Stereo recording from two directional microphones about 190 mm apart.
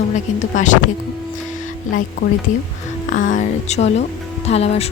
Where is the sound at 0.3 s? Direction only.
40° left (ahead or behind).